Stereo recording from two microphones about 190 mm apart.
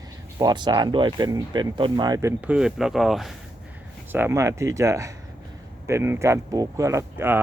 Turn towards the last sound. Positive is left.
turn(degrees=-15)  # may be behind; listen again after turning